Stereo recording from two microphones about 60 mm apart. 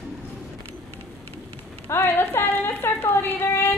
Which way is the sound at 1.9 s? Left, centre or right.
Left.